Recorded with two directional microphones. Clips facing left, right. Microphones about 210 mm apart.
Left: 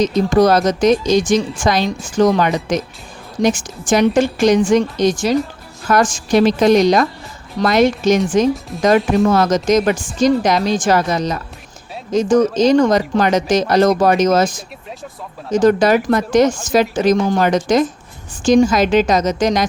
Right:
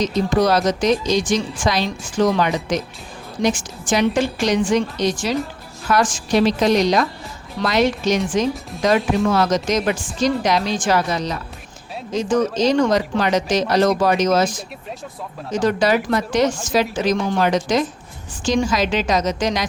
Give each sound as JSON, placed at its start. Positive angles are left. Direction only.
{"t": 0.0, "sound": "a woman's voice", "side_deg": 45}